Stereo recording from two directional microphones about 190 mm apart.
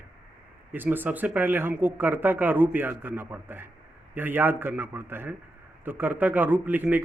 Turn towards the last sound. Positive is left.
turn(degrees=-10)  # may be behind; listen again after turning